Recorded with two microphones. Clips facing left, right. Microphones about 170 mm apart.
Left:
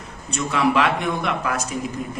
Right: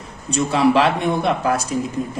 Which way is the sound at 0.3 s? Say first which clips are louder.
Right 4 dB; 30° right (ahead or behind).